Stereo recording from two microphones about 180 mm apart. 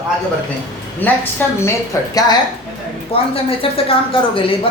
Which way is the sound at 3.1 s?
30° left (ahead or behind).